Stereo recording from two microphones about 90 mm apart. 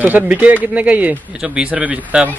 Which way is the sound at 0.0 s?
15° right (ahead or behind).